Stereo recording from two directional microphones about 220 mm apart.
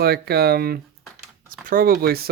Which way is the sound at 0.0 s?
45° right (ahead or behind).